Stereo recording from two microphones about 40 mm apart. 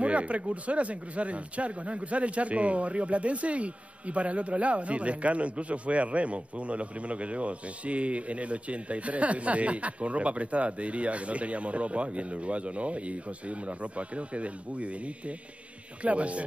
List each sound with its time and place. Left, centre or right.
0.0 s speech: right